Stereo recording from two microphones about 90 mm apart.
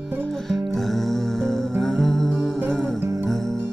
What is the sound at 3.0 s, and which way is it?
Music, 30° right (ahead or behind).